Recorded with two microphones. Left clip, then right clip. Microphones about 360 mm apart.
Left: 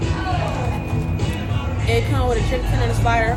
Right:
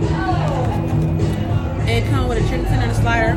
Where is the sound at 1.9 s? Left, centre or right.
Centre.